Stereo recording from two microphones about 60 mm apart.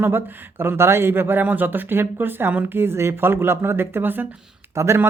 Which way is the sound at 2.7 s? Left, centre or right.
Right.